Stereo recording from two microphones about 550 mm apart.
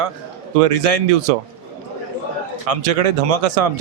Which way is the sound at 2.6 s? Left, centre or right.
Right.